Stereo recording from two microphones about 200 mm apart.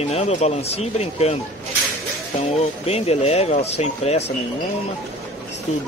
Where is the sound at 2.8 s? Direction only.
30° left (ahead or behind).